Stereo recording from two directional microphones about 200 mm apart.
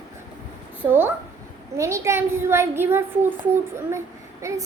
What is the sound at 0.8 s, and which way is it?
A woman's voice, 10° right (ahead or behind).